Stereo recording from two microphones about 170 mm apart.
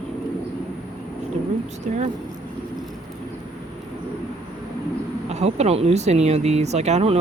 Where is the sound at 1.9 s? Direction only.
45° right (ahead or behind).